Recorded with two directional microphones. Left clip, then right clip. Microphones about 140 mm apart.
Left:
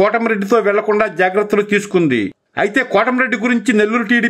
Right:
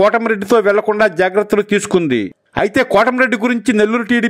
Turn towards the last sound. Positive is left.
turn(degrees=-40)  # may be behind; listen again after turning